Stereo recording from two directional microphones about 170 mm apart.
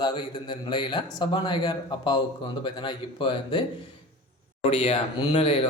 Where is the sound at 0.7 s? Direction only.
25° left (ahead or behind).